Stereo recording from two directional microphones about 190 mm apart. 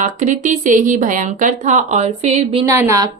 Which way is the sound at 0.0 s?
40° right (ahead or behind).